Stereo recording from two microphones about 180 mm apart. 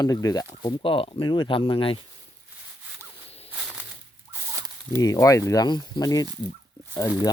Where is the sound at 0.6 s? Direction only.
30° left (ahead or behind).